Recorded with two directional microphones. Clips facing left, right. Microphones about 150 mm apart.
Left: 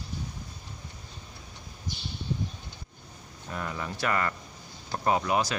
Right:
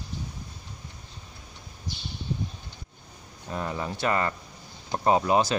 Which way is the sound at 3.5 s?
25° right (ahead or behind).